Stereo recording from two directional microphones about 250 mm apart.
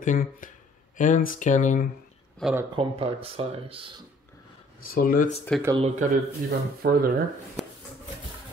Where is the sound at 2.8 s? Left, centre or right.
Right.